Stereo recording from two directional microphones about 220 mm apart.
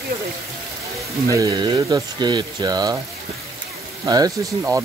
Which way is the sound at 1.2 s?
15° right (ahead or behind).